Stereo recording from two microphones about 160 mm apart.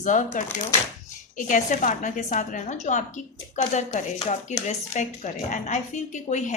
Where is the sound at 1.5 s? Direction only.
55° left (ahead or behind).